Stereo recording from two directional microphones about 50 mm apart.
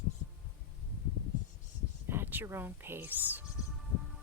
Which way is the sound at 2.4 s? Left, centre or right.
Right.